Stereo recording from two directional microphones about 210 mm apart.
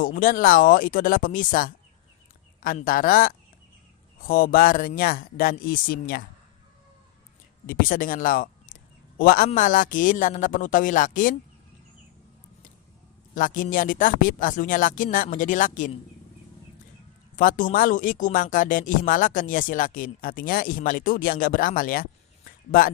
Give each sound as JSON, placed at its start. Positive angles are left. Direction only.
{"t": 0.0, "sound": "speech", "side_deg": 40}
{"t": 7.7, "sound": "speech", "side_deg": 40}
{"t": 13.3, "sound": "speech", "side_deg": 40}
{"t": 17.3, "sound": "speech", "side_deg": 40}
{"t": 22.4, "sound": "a sound", "side_deg": 40}